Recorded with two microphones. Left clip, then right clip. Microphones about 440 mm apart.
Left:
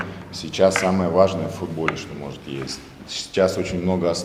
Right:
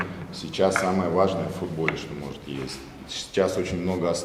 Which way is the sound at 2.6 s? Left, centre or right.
Left.